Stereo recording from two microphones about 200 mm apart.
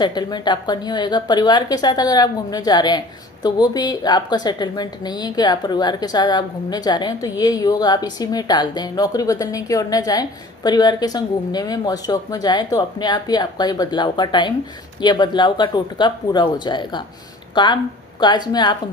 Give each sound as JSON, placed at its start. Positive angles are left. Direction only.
{"t": 0.0, "sound": "a woman's voice", "side_deg": 20}